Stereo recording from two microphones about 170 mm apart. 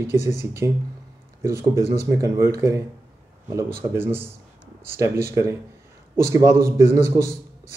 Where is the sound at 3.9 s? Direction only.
15° right (ahead or behind).